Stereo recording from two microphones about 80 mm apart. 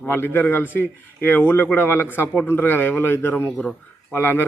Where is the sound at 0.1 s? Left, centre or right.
Left.